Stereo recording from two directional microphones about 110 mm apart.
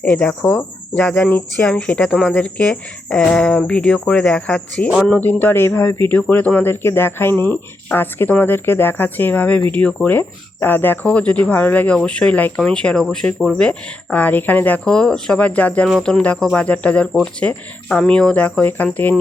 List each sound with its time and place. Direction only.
0.0 s cricket: 10° left (ahead or behind)
15.9 s speech: 5° left (ahead or behind)
16.5 s cricket: 10° left (ahead or behind)